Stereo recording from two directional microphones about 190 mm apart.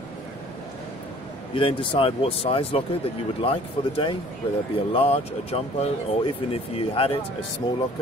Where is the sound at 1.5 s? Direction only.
30° left (ahead or behind).